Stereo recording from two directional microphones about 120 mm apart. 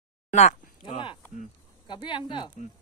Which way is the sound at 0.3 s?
75° left (ahead or behind).